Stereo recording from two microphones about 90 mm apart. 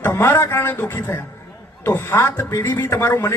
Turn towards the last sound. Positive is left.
turn(degrees=30)  # may be behind; listen again after turning